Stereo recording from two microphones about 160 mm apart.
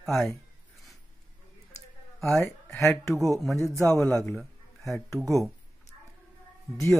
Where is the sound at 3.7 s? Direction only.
20° right (ahead or behind).